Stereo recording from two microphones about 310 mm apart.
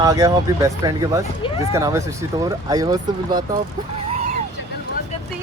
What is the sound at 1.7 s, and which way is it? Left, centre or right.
Speech, centre.